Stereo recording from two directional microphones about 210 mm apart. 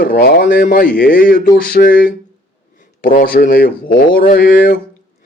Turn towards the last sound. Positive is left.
turn(degrees=40)  # may be behind; listen again after turning